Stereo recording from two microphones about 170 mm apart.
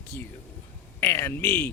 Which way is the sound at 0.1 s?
10° left (ahead or behind).